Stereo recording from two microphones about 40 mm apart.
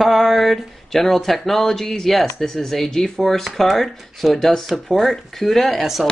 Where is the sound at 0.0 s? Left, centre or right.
Centre.